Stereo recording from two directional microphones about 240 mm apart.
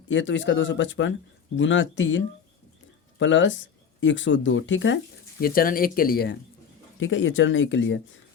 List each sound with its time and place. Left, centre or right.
0.1 s speech: left
5.4 s speech: left
7.0 s speech: left